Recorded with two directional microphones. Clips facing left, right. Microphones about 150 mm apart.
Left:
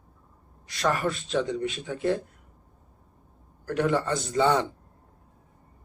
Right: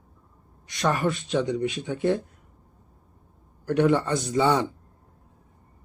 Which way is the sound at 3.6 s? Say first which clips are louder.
Right 4 dB; 20° right (ahead or behind).